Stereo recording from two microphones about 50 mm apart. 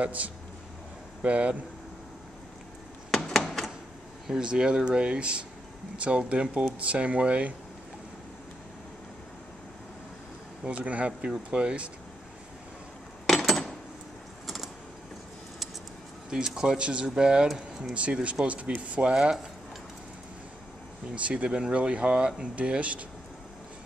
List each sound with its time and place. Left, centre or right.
0.0 s speech: right
3.3 s a sound: centre
4.3 s speech: centre
10.6 s speech: right
13.3 s coin: centre
14.4 s vehicle: centre
16.3 s speech: centre
17.5 s speech: centre
18.2 s speech: right
21.1 s speech: right